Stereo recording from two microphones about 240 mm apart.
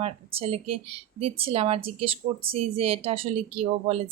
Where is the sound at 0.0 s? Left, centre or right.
Right.